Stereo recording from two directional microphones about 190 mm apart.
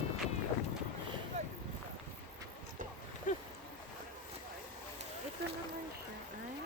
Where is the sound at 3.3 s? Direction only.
40° left (ahead or behind).